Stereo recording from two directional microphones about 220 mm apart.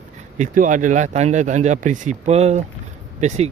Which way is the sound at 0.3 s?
35° right (ahead or behind).